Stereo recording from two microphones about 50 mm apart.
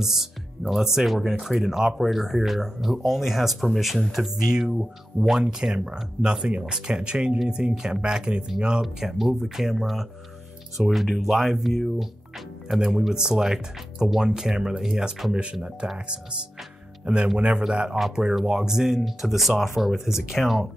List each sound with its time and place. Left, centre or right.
0.0 s speech: centre
8.8 s speech: centre; by 16.0 s right
17.0 s speech: right; by 20.6 s centre